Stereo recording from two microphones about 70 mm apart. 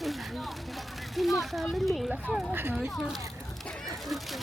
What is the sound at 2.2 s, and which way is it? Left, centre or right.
Speech, centre.